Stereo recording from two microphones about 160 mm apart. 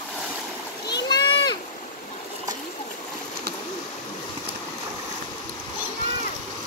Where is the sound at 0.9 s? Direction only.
25° left (ahead or behind).